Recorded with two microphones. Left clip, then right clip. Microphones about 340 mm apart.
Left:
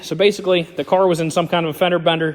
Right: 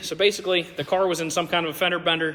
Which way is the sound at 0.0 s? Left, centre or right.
Centre.